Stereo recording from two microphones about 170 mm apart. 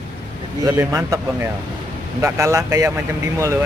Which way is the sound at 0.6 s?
15° right (ahead or behind).